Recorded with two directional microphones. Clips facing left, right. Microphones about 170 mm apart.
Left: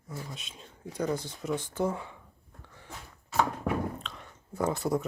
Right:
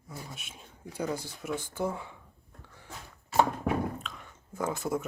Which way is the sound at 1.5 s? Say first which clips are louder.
Left 2 dB; 20° left (ahead or behind).